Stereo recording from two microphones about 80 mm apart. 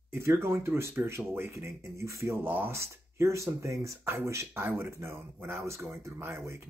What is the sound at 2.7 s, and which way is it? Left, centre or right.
Speech, right.